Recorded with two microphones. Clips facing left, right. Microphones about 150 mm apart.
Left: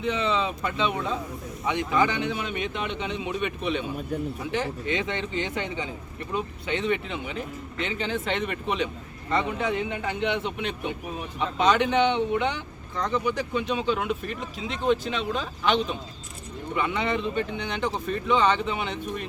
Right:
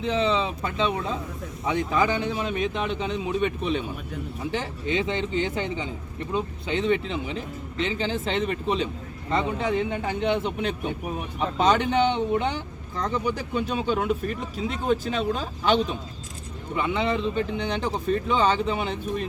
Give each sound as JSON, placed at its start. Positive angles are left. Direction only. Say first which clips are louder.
{"t": 0.0, "sound": "a man's voice", "louder": "right 2 dB", "side_deg": -30}